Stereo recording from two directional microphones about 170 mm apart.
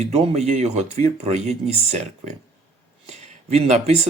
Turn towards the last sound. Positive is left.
turn(degrees=-40)  # may be behind; listen again after turning